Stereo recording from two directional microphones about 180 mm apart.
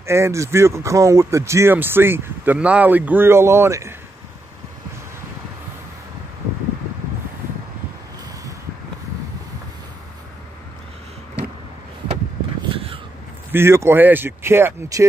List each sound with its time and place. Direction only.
0.0 s speech: 15° right (ahead or behind)
12.6 s a sound: 30° right (ahead or behind)
13.5 s speech: 15° right (ahead or behind)